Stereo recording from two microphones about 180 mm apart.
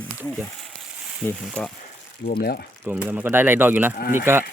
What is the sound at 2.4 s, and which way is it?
Speech, 60° left (ahead or behind).